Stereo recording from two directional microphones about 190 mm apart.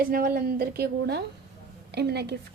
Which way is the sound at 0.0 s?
50° right (ahead or behind).